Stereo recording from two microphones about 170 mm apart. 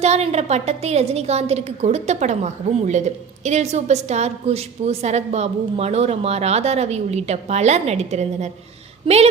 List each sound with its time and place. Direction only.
0.0 s a woman's voice: 40° right (ahead or behind)